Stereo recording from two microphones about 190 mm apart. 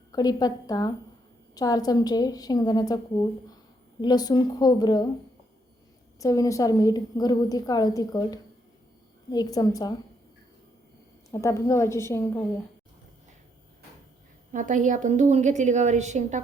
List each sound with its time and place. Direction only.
0.1 s a woman's voice: 20° left (ahead or behind)
6.1 s a woman's voice: 20° left (ahead or behind)
11.3 s a woman's voice: 15° left (ahead or behind)
14.5 s a woman's voice: 40° right (ahead or behind)